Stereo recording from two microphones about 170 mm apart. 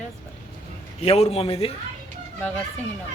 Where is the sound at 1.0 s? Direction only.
35° left (ahead or behind).